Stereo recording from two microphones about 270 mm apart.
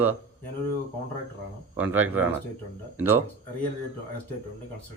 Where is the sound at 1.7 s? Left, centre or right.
Centre.